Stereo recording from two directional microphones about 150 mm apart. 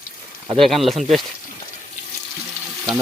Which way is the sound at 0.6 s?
Centre (ahead or behind).